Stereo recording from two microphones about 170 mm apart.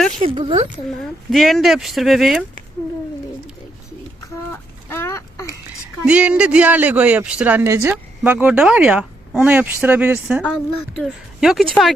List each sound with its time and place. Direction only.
0.2 s speech: 30° right (ahead or behind)
0.9 s speech: centre (ahead or behind)
4.9 s a sound: 15° left (ahead or behind)
6.1 s a man's voice: 5° right (ahead or behind)